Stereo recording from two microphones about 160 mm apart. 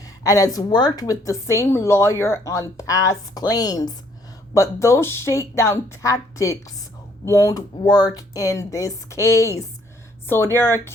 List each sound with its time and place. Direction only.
0.2 s speech: 20° left (ahead or behind)